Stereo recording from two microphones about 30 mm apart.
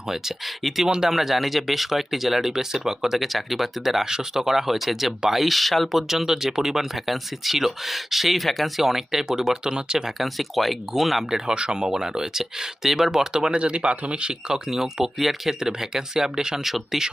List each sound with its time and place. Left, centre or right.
0.4 s speech: centre
3.2 s speech: centre
5.9 s speech: centre
6.9 s speech: centre; by 10.1 s right
10.2 s speech: centre
11.3 s speech: centre
11.5 s speech: right
13.5 s speech: right
13.9 s speech: right
14.2 s speech: right
14.7 s speech: centre
15.2 s speech: centre
15.6 s speech: centre
16.6 s speech: centre